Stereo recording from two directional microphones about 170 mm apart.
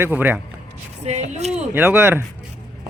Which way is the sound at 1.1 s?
40° right (ahead or behind).